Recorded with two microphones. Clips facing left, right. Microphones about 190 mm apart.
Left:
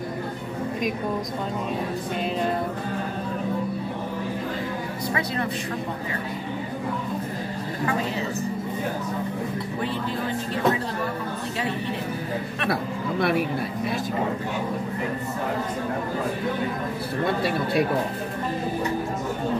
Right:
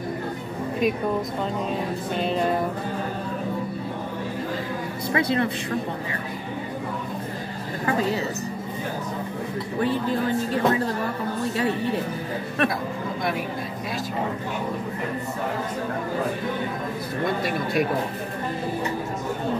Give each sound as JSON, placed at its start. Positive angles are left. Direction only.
{"t": 17.4, "sound": "speech", "side_deg": 30}